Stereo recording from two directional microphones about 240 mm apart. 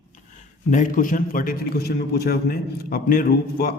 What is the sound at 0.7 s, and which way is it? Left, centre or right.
A man's voice, left.